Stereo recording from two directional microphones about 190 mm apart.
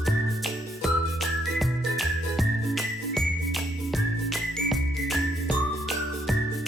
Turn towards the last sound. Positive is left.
turn(degrees=0)  # may be behind; listen again after turning